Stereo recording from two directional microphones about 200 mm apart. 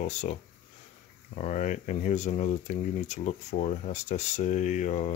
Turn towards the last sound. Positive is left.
turn(degrees=35)  # may be behind; listen again after turning